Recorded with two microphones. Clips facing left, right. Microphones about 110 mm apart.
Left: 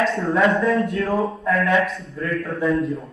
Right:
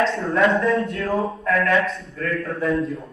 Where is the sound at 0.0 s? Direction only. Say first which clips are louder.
Even; centre (ahead or behind).